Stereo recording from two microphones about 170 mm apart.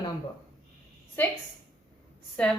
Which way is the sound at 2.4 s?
10° left (ahead or behind).